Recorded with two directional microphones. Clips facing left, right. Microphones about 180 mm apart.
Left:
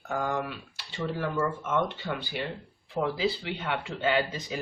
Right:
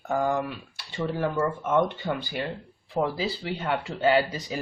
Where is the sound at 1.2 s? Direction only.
45° right (ahead or behind).